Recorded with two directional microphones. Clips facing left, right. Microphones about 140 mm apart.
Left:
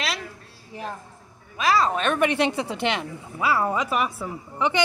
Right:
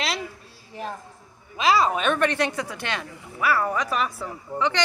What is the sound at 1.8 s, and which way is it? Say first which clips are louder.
Speech: right 1 dB; 5° right (ahead or behind).